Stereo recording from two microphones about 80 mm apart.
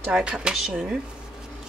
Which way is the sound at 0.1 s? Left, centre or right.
Centre.